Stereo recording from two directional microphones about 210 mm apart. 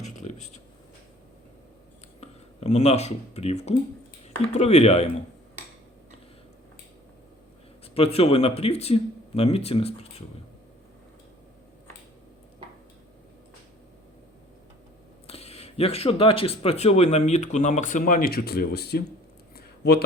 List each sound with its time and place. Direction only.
0.0 s speech: 35° left (ahead or behind)
2.2 s speech: 30° left (ahead or behind)
7.9 s speech: 30° left (ahead or behind)
15.3 s speech: 30° left (ahead or behind); by 19.0 s 50° left (ahead or behind)
19.5 s a sound: 50° left (ahead or behind)